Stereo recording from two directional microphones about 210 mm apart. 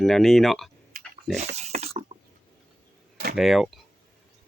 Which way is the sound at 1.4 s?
30° right (ahead or behind).